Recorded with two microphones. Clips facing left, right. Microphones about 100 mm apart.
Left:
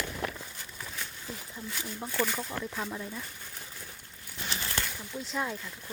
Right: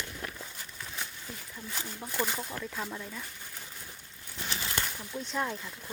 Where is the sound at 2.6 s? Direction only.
15° left (ahead or behind).